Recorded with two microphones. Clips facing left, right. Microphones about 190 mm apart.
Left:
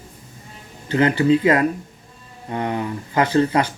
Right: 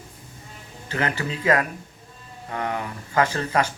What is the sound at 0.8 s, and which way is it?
Speech, 25° left (ahead or behind).